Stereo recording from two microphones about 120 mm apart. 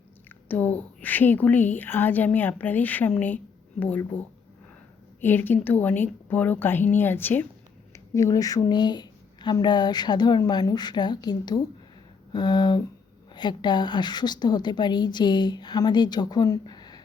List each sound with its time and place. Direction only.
0.4 s a woman's voice: 15° left (ahead or behind)
5.2 s a woman's voice: 15° left (ahead or behind); by 17.0 s 35° left (ahead or behind)